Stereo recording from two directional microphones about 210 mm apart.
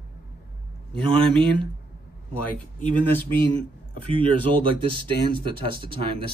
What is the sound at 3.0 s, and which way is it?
Speech, 10° left (ahead or behind).